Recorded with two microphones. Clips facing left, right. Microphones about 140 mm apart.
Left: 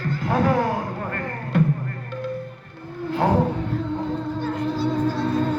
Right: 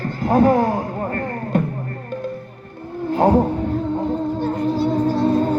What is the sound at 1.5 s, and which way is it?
Music, 50° right (ahead or behind).